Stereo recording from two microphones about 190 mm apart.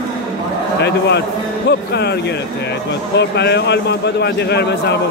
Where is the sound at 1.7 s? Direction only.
60° left (ahead or behind).